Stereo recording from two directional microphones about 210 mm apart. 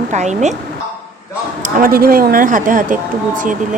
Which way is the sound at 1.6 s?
40° right (ahead or behind).